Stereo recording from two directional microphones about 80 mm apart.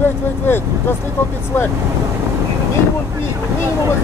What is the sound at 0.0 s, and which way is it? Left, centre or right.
Speech, left.